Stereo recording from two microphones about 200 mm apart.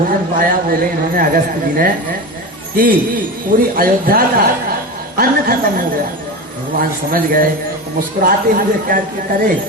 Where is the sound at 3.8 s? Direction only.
45° right (ahead or behind).